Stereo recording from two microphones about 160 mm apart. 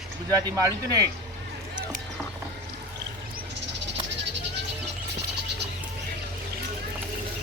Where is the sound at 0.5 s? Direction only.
20° right (ahead or behind).